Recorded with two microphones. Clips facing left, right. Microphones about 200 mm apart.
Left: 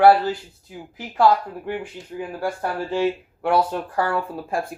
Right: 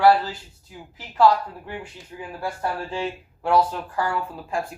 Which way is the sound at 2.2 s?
60° left (ahead or behind).